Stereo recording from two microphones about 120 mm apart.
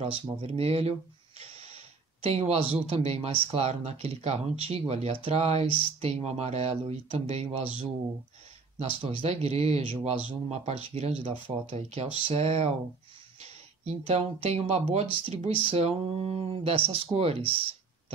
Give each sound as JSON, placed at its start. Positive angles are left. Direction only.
{"t": 0.0, "sound": "speech", "side_deg": -55}
{"t": 2.2, "sound": "speech", "side_deg": -60}
{"t": 8.7, "sound": "speech", "side_deg": -55}